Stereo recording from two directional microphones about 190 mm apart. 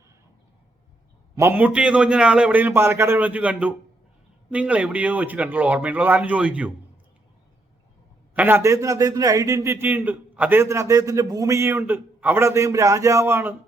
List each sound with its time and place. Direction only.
1.4 s a man's voice: 10° right (ahead or behind)
8.4 s a man's voice: 10° right (ahead or behind)